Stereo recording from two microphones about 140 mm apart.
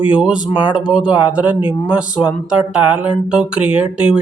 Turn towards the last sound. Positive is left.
turn(degrees=-10)  # may be behind; listen again after turning